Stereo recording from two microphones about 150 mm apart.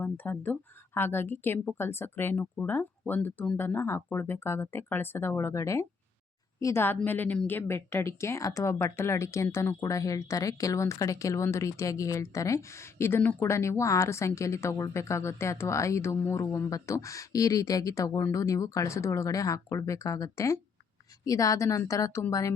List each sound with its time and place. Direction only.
0.0 s a woman's voice: 10° left (ahead or behind)